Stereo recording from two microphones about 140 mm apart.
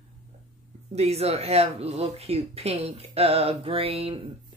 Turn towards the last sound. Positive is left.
turn(degrees=-40)  # may be behind; listen again after turning